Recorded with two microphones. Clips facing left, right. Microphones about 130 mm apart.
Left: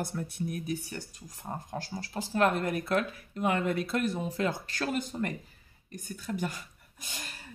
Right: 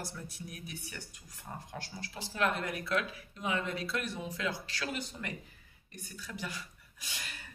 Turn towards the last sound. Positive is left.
turn(degrees=45)  # may be behind; listen again after turning